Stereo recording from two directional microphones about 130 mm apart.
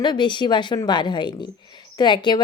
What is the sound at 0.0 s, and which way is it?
Speech, 35° left (ahead or behind).